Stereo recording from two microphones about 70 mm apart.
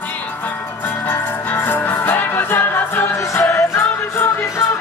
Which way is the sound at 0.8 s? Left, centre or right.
Left.